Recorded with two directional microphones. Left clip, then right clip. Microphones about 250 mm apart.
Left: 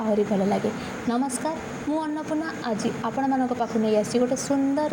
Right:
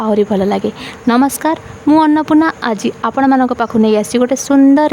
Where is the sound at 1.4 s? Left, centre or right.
Right.